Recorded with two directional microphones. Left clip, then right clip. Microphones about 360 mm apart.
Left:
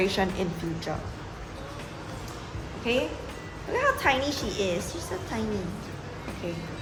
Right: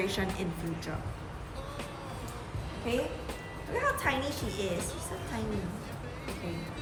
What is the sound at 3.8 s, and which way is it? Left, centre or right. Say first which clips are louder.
Speech: left 6 dB; centre.